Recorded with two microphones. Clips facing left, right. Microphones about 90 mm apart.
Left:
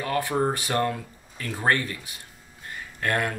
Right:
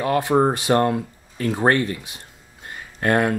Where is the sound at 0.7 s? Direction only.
35° right (ahead or behind).